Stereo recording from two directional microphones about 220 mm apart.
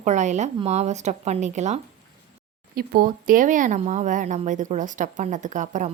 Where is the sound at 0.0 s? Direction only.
30° right (ahead or behind).